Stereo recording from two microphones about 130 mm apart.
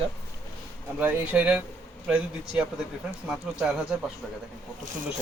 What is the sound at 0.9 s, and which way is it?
Speech, 15° right (ahead or behind).